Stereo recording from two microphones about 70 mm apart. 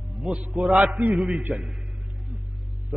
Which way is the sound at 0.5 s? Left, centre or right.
Centre.